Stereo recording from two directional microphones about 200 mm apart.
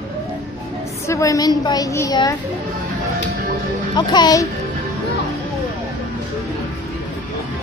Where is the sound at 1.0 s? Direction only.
15° left (ahead or behind).